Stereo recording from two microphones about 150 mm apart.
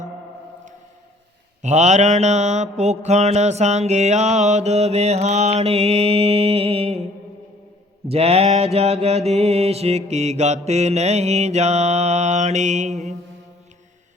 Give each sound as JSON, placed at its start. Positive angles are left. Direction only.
{"t": 1.6, "sound": "mantra", "side_deg": -50}
{"t": 8.0, "sound": "mantra", "side_deg": -40}